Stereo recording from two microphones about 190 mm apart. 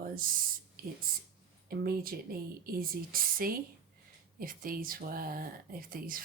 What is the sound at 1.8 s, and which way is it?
Speech, 50° right (ahead or behind).